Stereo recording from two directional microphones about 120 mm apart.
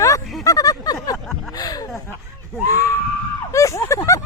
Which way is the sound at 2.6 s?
30° left (ahead or behind).